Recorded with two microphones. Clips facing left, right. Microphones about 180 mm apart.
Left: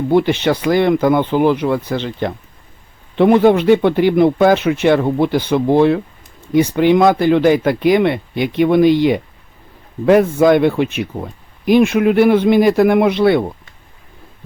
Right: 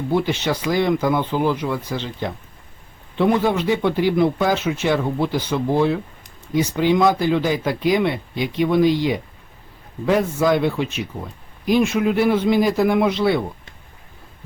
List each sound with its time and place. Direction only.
0.1 s speech: 65° left (ahead or behind)